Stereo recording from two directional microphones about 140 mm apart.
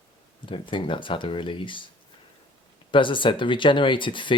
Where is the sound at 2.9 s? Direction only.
35° left (ahead or behind).